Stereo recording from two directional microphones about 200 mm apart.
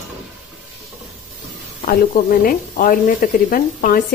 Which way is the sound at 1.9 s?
45° left (ahead or behind).